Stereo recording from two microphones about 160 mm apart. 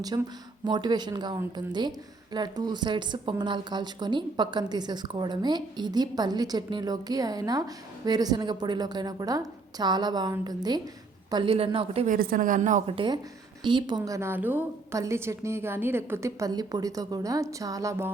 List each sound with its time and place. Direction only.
0.1 s a woman's voice: 30° right (ahead or behind)
12.0 s a woman's voice: 60° right (ahead or behind)
13.6 s a woman's voice: 30° right (ahead or behind)